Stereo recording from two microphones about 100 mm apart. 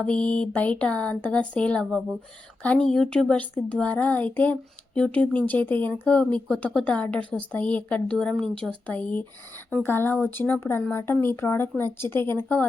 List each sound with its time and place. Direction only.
0.0 s speech: 10° left (ahead or behind)
8.9 s speech: 15° left (ahead or behind)